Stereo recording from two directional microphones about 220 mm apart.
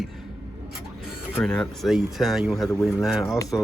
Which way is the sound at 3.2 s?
15° left (ahead or behind).